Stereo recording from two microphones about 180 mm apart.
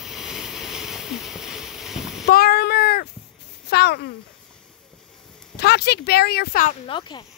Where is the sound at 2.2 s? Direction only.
55° left (ahead or behind).